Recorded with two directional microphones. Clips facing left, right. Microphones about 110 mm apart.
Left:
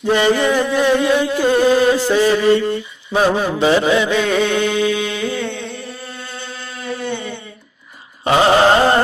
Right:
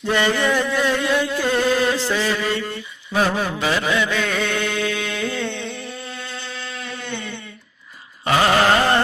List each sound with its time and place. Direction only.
0.0 s music: 15° left (ahead or behind)
3.1 s mantra: 20° left (ahead or behind)
6.2 s music: 35° left (ahead or behind)
8.2 s carnatic music: 25° left (ahead or behind)